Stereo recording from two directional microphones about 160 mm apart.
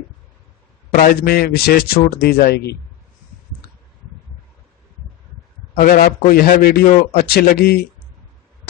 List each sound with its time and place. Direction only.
0.9 s a man's voice: 65° left (ahead or behind)
5.8 s a man's voice: 60° left (ahead or behind)